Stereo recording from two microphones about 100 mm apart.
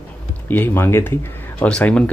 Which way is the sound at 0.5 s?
20° left (ahead or behind).